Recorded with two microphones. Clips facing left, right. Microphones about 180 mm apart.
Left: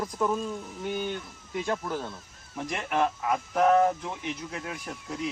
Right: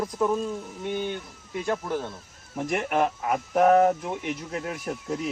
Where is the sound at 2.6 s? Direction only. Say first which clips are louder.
Right 3 dB; 50° right (ahead or behind).